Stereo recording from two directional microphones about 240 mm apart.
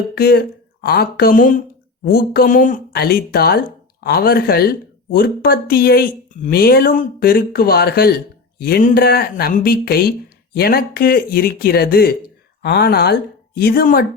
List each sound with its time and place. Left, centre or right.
0.1 s speech: left